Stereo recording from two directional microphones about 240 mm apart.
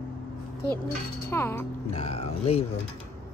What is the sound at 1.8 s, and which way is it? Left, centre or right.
Speech, left.